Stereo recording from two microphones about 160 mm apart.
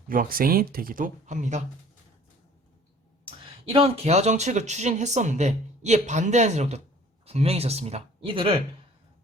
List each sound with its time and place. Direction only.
0.1 s speech: 65° right (ahead or behind)
3.2 s speech: 35° right (ahead or behind)